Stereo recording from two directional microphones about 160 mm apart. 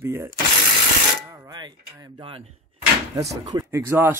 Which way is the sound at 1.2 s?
20° right (ahead or behind).